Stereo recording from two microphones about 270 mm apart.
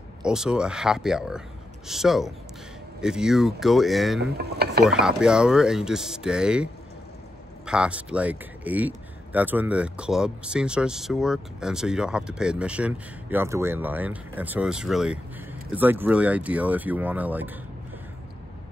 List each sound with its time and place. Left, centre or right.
0.2 s a man's voice: centre
4.2 s speech: right
4.8 s a man's voice: centre